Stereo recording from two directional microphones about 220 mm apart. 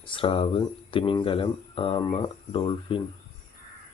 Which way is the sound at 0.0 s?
25° left (ahead or behind).